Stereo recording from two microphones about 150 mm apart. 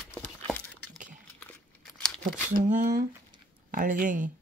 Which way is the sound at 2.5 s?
60° right (ahead or behind).